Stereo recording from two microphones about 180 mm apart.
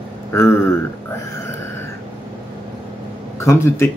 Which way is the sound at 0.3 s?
15° left (ahead or behind).